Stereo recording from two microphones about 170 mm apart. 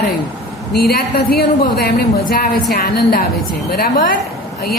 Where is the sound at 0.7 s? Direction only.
65° left (ahead or behind).